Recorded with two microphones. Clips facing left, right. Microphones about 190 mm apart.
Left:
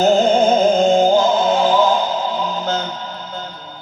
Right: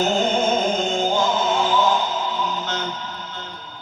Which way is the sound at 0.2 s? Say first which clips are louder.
Left 7 dB; 40° left (ahead or behind).